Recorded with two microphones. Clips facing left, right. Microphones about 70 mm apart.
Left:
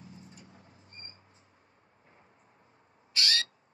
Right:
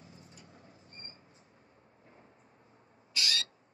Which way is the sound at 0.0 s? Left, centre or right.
Right.